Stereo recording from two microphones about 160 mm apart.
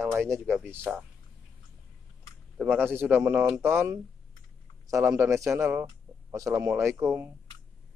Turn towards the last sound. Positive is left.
turn(degrees=-15)  # may be behind; listen again after turning